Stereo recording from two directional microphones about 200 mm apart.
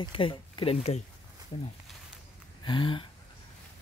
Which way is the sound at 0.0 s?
25° left (ahead or behind).